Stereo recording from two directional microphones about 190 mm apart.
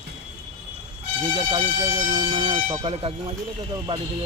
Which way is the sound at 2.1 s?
25° right (ahead or behind).